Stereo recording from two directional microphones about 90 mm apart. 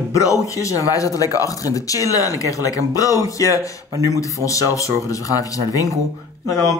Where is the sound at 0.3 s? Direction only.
35° left (ahead or behind).